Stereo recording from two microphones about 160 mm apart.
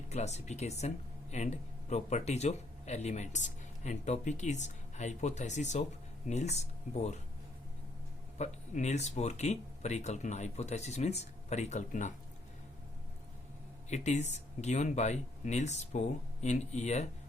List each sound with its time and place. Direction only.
0.1 s speech: 45° left (ahead or behind)
8.4 s speech: 45° left (ahead or behind)
13.9 s speech: 45° left (ahead or behind)